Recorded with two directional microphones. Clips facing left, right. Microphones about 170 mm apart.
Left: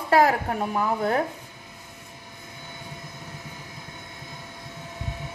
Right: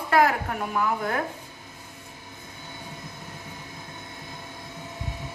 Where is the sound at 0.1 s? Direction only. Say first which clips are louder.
Left 2 dB; 35° left (ahead or behind).